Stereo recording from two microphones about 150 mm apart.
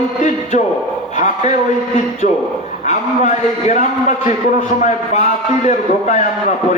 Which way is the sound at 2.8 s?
50° left (ahead or behind).